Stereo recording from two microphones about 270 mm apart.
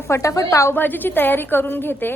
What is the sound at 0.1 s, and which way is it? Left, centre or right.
A woman's voice, centre.